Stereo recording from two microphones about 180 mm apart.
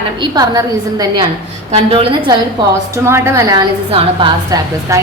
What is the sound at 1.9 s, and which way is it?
Speech, 30° right (ahead or behind).